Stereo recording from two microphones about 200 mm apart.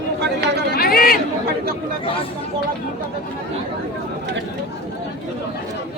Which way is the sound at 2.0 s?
25° left (ahead or behind).